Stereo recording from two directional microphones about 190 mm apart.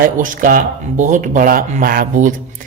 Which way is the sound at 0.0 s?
45° right (ahead or behind).